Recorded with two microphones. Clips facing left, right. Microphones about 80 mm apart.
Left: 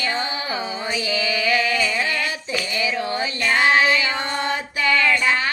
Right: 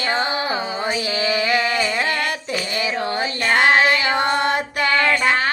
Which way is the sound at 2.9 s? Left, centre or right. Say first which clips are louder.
Right 2 dB; right.